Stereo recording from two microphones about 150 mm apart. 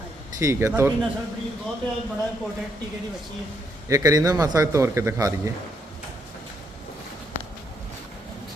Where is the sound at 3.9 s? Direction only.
25° right (ahead or behind).